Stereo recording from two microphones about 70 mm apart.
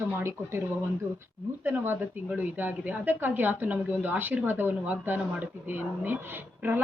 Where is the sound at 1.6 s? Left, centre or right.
Right.